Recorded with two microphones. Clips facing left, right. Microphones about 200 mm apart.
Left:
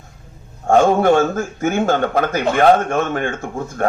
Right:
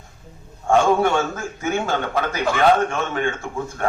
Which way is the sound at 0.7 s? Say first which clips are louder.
Left 4 dB; 40° left (ahead or behind).